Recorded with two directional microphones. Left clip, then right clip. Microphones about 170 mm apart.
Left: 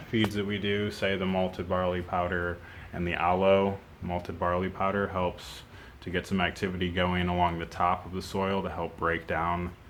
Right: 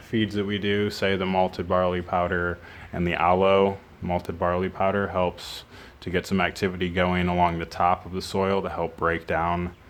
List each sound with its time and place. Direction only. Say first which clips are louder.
0.1 s speech: right 3 dB; 50° right (ahead or behind)